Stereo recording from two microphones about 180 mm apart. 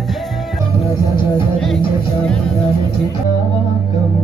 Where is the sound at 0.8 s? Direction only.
25° left (ahead or behind).